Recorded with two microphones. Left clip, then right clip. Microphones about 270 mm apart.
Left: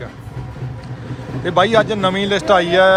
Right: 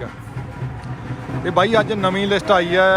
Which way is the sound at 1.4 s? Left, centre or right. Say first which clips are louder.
Left 3 dB; centre.